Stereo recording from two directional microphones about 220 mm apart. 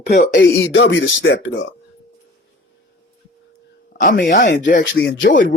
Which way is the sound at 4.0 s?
45° left (ahead or behind).